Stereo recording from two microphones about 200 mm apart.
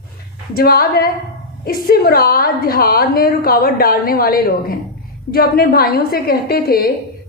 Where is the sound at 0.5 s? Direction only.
50° left (ahead or behind).